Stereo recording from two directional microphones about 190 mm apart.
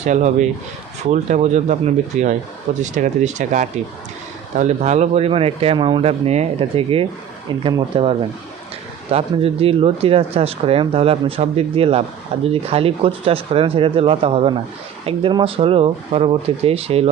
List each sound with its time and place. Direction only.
0.0 s speech: 40° right (ahead or behind)
9.1 s speech: 30° right (ahead or behind)